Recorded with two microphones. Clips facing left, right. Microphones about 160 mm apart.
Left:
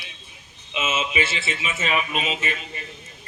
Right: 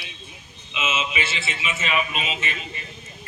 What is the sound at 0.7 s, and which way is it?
Speech, 40° left (ahead or behind).